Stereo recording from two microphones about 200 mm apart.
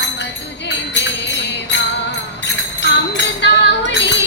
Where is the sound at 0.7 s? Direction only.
60° left (ahead or behind).